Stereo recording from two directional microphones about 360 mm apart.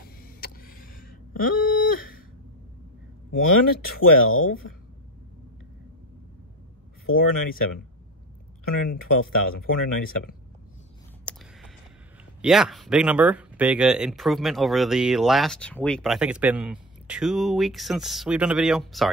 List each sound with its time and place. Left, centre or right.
0.2 s vehicle: left
1.3 s a sound: left
3.4 s speech: left
7.1 s speech: left
8.9 s speech: left
11.3 s a sound: centre
12.4 s speech: centre